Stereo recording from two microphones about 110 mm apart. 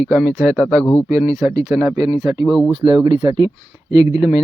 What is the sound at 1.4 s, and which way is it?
Speech, 35° right (ahead or behind).